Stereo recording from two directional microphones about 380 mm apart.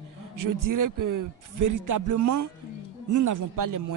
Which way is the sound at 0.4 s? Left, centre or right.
Right.